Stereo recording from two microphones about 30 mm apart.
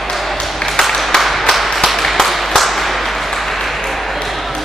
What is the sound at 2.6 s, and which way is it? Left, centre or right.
Whip, centre.